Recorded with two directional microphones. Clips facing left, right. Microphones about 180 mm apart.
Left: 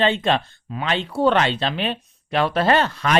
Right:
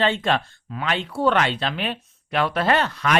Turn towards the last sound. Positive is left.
turn(degrees=30)  # may be behind; listen again after turning